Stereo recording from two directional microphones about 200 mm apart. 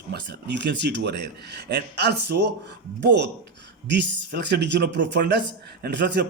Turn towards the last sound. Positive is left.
turn(degrees=-60)  # may be behind; listen again after turning